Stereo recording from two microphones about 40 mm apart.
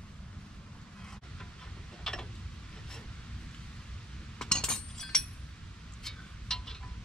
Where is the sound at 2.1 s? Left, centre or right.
Centre.